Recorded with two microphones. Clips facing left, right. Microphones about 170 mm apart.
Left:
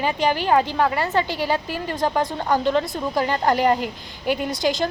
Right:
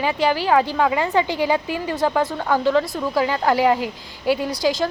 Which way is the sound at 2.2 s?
15° left (ahead or behind).